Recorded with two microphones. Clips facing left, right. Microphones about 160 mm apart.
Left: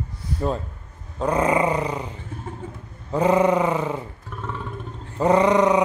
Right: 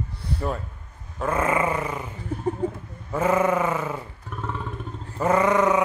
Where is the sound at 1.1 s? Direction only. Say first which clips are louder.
Left 3 dB; 20° left (ahead or behind).